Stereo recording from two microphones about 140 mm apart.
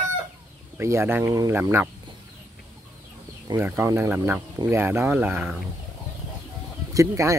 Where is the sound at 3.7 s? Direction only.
15° right (ahead or behind).